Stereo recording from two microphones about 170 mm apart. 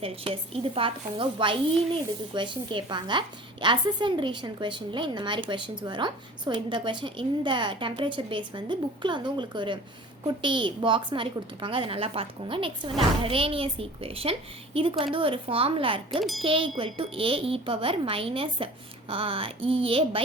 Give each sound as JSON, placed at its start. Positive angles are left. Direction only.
{"t": 0.0, "sound": "a woman's voice", "side_deg": -35}